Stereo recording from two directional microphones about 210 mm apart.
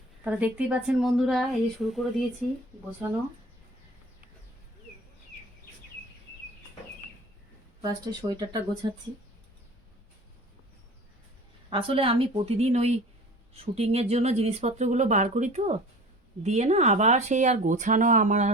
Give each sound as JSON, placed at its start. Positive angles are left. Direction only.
{"t": 0.3, "sound": "speech", "side_deg": -5}
{"t": 7.8, "sound": "a woman's voice", "side_deg": -20}
{"t": 11.7, "sound": "a woman's voice", "side_deg": -25}